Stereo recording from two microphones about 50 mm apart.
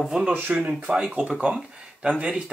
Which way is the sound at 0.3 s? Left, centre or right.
Right.